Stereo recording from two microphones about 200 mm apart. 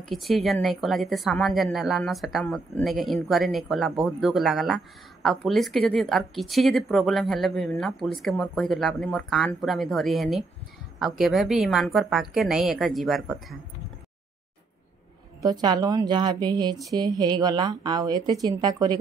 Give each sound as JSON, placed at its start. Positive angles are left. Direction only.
{"t": 0.0, "sound": "speech", "side_deg": 0}
{"t": 15.4, "sound": "a woman's voice", "side_deg": -20}